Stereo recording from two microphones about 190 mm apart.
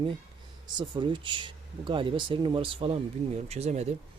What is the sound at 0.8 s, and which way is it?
Speech, 25° right (ahead or behind).